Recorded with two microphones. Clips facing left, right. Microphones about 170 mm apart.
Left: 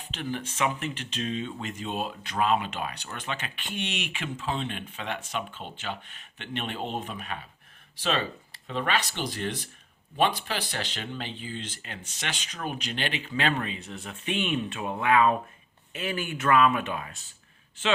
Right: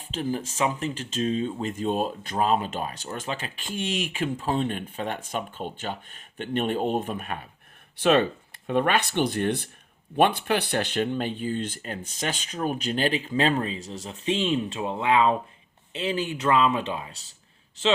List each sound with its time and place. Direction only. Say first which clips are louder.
0.1 s speech: right 5 dB; 35° right (ahead or behind)